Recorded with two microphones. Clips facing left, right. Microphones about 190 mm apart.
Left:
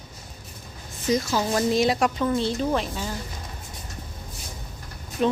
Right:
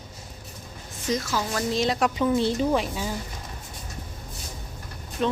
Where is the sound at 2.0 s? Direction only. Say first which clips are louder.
Right 1 dB; 10° right (ahead or behind).